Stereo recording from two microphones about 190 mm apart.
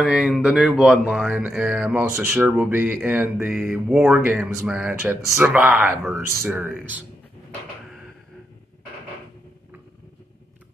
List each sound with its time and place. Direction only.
0.0 s speech: 5° right (ahead or behind)